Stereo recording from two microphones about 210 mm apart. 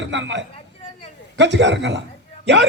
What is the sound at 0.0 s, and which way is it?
A man's voice, 60° right (ahead or behind).